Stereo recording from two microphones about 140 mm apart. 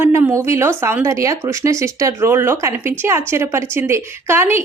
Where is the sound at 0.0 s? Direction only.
20° right (ahead or behind).